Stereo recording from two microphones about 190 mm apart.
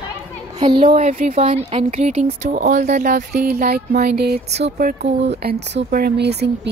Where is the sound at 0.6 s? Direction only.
25° right (ahead or behind).